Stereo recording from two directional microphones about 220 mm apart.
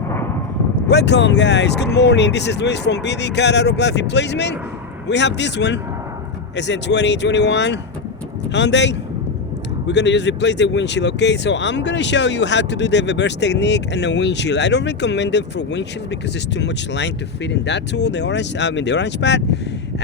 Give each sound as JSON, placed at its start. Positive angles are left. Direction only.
{"t": 0.9, "sound": "speech", "side_deg": 50}